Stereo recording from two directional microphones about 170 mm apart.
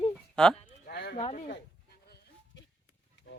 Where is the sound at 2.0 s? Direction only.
70° left (ahead or behind).